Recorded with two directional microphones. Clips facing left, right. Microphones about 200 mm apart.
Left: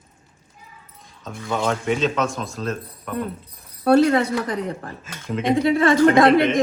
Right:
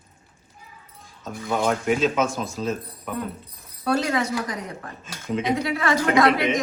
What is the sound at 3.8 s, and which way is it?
Speech, 55° left (ahead or behind).